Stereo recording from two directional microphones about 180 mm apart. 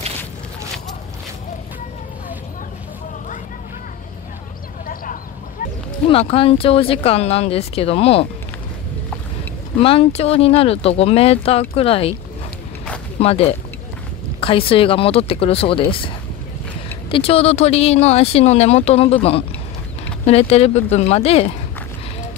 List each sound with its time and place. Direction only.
6.0 s speech: 30° left (ahead or behind)
9.8 s speech: 30° left (ahead or behind)
13.2 s speech: 35° left (ahead or behind)
17.1 s speech: 30° left (ahead or behind)